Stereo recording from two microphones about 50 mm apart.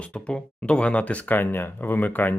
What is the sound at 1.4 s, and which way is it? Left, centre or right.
Speech, left.